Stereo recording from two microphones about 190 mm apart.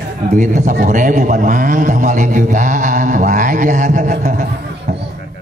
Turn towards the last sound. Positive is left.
turn(degrees=-40)  # may be behind; listen again after turning